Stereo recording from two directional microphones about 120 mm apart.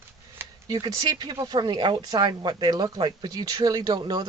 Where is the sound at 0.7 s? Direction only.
35° right (ahead or behind).